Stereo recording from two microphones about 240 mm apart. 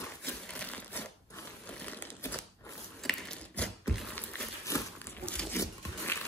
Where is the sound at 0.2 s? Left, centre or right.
Centre.